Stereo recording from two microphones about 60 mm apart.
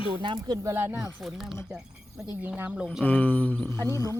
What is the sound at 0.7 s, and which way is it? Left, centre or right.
Speech, right.